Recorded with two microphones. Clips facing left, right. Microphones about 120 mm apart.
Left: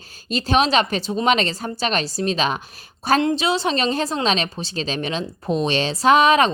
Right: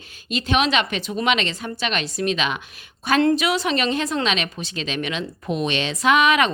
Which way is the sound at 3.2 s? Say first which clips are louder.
Right 1 dB; 25° left (ahead or behind).